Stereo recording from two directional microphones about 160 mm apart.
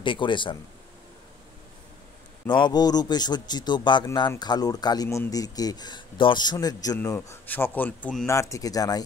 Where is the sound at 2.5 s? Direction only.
25° left (ahead or behind); by 8.3 s 10° left (ahead or behind).